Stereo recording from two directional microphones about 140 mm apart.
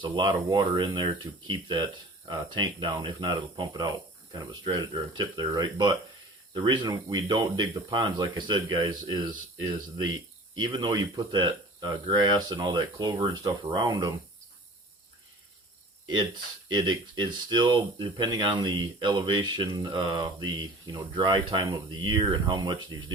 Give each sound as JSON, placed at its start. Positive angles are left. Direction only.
{"t": 0.0, "sound": "speech", "side_deg": -35}
{"t": 10.5, "sound": "speech", "side_deg": -35}
{"t": 16.0, "sound": "speech", "side_deg": -35}